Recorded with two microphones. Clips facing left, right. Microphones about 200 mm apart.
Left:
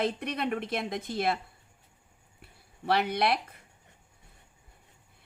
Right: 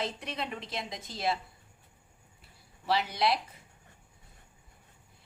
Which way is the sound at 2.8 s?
60° left (ahead or behind).